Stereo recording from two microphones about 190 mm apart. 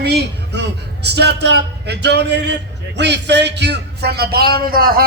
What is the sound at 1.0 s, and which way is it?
A man's voice, 60° right (ahead or behind).